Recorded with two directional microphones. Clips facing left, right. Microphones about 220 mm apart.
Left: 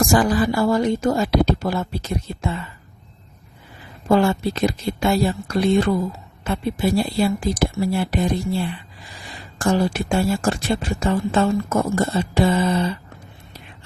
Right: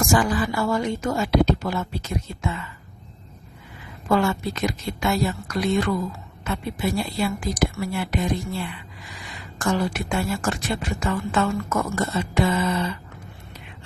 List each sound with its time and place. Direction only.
0.0 s a woman's voice: 35° left (ahead or behind)
4.1 s a woman's voice: 30° left (ahead or behind)